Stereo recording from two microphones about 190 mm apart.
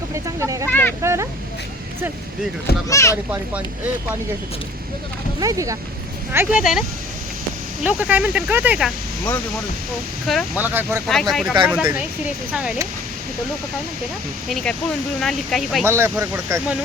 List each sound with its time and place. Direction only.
0.1 s speech: 15° right (ahead or behind)
0.7 s vehicle: 10° left (ahead or behind)
1.0 s a sound: 15° right (ahead or behind)
2.9 s speech: 15° left (ahead or behind)
5.4 s speech: 15° right (ahead or behind)
7.9 s speech: 10° right (ahead or behind)
10.3 s speech: centre (ahead or behind)
11.0 s speech: centre (ahead or behind)
14.5 s speech: 5° left (ahead or behind)
15.8 s speech: 15° right (ahead or behind)